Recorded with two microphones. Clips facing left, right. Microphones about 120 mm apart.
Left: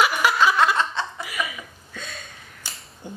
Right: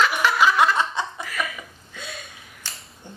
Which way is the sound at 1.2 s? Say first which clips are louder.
Even; 10° left (ahead or behind).